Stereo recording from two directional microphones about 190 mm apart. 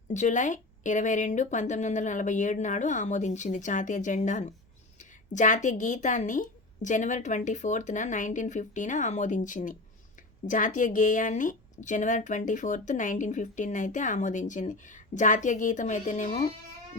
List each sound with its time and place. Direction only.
0.1 s speech: 40° left (ahead or behind)